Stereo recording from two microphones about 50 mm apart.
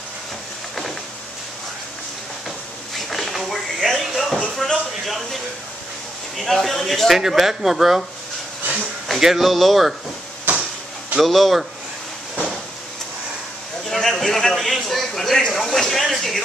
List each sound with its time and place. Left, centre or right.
3.1 s a sound: centre
5.0 s a man's voice: centre
9.2 s a man's voice: centre
10.5 s a sound: right
11.1 s a man's voice: centre
13.8 s a man's voice: centre